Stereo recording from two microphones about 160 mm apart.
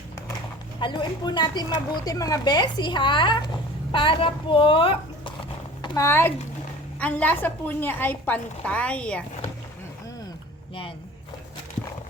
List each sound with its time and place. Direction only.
0.8 s a woman's voice: 30° left (ahead or behind)
6.1 s a woman's voice: 15° left (ahead or behind)